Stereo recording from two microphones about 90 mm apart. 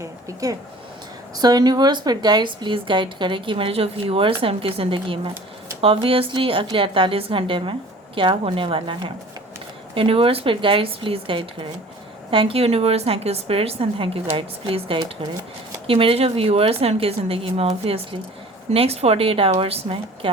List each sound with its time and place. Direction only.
0.0 s a sound: 35° right (ahead or behind)
1.4 s a woman's voice: 45° right (ahead or behind); by 9.1 s 70° right (ahead or behind)
9.9 s speech: 85° right
12.3 s a woman's voice: 85° right